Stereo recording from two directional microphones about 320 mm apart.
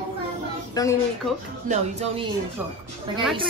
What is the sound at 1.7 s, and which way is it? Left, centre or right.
Speech, centre.